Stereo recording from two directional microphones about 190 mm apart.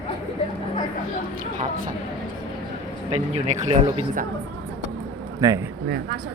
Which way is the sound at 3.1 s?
35° right (ahead or behind).